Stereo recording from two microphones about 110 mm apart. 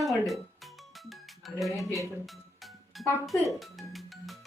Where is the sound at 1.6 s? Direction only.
Centre (ahead or behind).